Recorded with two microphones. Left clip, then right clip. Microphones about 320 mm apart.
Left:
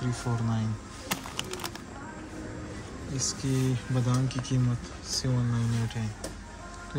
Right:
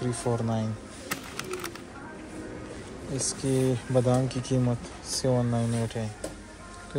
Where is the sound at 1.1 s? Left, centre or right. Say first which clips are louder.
Left 1 dB; left.